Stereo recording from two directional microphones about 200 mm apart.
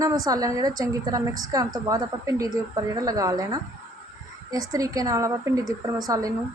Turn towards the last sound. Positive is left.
turn(degrees=-15)  # may be behind; listen again after turning